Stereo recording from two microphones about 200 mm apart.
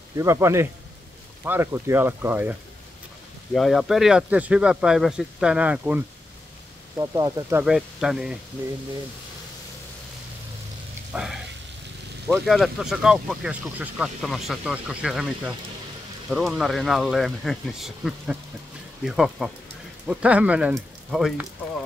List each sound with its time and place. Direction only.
0.2 s speech: 15° right (ahead or behind)
3.5 s speech: centre (ahead or behind)
7.0 s speech: 20° right (ahead or behind)
7.6 s speech: 5° right (ahead or behind)
11.1 s speech: centre (ahead or behind)